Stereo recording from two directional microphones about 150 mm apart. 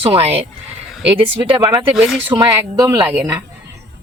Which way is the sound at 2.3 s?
30° right (ahead or behind).